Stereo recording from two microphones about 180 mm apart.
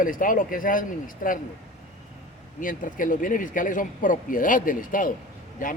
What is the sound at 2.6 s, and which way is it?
A man's voice, 50° left (ahead or behind).